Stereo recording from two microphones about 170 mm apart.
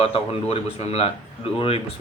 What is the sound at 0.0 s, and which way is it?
A man's voice, 35° left (ahead or behind).